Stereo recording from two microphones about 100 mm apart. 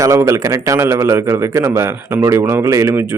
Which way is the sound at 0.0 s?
30° right (ahead or behind).